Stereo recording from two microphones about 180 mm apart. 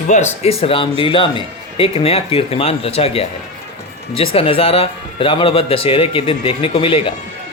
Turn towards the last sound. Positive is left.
turn(degrees=30)  # may be behind; listen again after turning